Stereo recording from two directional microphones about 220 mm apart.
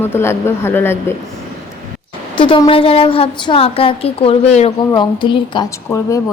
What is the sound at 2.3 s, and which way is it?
A woman's voice, 20° left (ahead or behind).